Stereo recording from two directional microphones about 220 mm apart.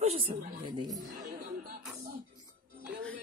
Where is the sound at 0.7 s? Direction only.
20° right (ahead or behind).